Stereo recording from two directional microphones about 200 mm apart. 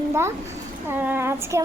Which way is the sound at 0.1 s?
15° right (ahead or behind).